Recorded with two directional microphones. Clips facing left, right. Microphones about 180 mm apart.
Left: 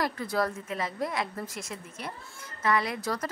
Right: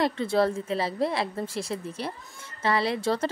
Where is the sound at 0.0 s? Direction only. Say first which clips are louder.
Right 5 dB; 25° right (ahead or behind).